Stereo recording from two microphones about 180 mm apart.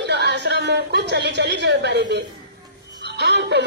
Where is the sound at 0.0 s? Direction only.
70° right (ahead or behind).